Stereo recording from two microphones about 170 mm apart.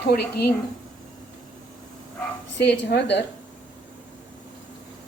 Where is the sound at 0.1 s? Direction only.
70° left (ahead or behind).